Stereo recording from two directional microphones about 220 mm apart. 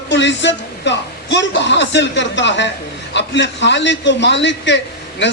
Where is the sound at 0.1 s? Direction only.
55° left (ahead or behind).